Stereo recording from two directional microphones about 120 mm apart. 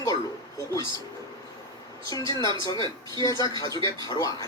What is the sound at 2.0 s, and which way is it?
Speech, 30° left (ahead or behind).